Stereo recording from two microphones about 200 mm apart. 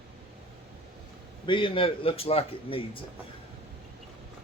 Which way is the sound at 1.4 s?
25° left (ahead or behind).